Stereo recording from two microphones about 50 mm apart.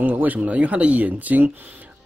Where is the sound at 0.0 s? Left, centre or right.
Right.